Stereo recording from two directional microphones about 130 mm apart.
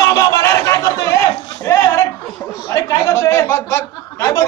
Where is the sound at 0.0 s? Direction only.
25° left (ahead or behind).